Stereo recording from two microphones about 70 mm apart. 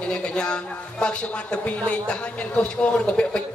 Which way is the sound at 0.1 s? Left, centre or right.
Centre.